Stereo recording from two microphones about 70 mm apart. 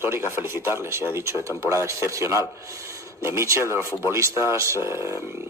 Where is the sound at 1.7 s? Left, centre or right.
Right.